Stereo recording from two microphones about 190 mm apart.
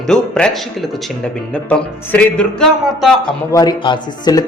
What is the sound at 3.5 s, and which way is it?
Speech, 20° left (ahead or behind).